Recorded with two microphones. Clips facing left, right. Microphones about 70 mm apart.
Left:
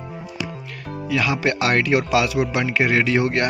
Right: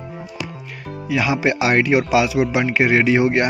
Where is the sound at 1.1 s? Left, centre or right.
Centre.